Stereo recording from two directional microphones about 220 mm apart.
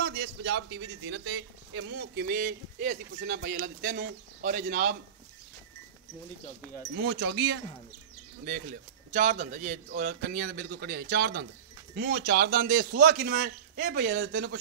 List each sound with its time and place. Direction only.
0.0 s a man's voice: 45° right (ahead or behind)
7.0 s a man's voice: 55° right (ahead or behind)
9.1 s a man's voice: 35° right (ahead or behind)